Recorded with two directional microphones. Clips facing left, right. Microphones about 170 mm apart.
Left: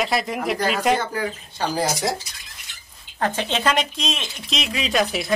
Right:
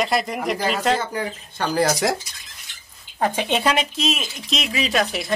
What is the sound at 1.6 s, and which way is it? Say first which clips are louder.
Speech: right 3 dB; 70° right (ahead or behind).